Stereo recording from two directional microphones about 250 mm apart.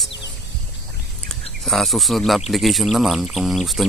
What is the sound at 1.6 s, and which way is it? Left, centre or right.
Speech, centre.